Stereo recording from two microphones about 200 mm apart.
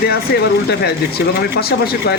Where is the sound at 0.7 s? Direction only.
55° left (ahead or behind).